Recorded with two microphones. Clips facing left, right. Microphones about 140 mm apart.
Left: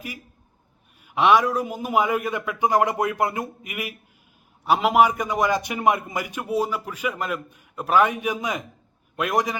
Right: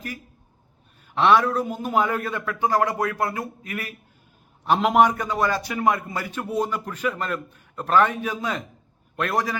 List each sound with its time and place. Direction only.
1.0 s a man's voice: 10° left (ahead or behind)